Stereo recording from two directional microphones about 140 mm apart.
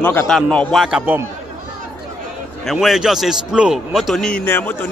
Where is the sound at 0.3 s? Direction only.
5° left (ahead or behind).